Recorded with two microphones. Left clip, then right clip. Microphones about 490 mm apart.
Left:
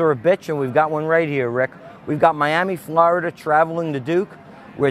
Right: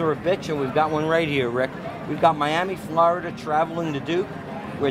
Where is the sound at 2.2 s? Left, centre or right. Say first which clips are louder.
Left 3 dB; left.